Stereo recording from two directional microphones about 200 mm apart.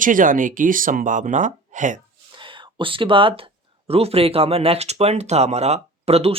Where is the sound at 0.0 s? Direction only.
40° right (ahead or behind).